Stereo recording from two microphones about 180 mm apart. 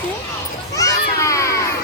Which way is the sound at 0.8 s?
20° left (ahead or behind).